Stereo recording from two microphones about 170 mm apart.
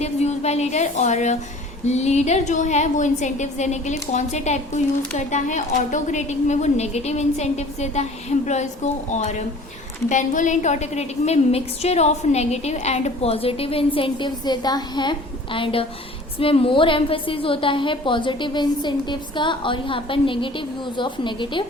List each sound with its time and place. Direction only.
0.0 s a woman's voice: 40° left (ahead or behind)